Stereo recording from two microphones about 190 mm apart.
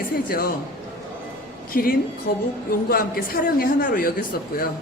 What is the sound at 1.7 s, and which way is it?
A woman's voice, 50° left (ahead or behind).